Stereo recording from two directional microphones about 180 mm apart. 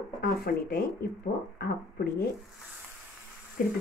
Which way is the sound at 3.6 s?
50° left (ahead or behind).